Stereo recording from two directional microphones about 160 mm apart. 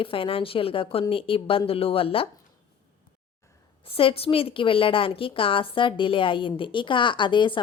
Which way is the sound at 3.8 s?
35° left (ahead or behind).